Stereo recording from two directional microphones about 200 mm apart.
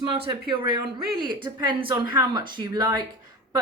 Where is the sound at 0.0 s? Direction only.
25° right (ahead or behind).